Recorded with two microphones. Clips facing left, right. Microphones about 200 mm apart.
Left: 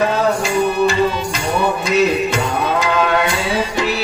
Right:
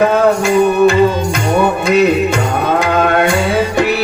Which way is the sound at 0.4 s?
55° right (ahead or behind).